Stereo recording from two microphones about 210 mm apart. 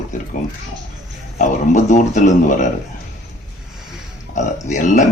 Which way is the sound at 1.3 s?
35° left (ahead or behind).